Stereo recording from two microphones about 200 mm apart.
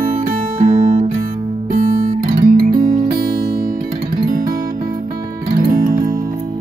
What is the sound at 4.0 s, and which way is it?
Music, 45° right (ahead or behind).